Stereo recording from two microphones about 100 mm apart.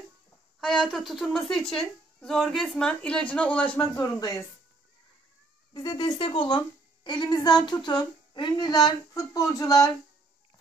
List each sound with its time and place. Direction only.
0.6 s speech: 5° left (ahead or behind)
4.0 s speech: 40° left (ahead or behind)
5.7 s speech: 45° left (ahead or behind)
6.1 s speech: 55° left (ahead or behind)
7.1 s speech: 45° left (ahead or behind)